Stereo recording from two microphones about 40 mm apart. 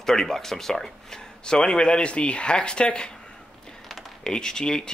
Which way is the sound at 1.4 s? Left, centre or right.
Left.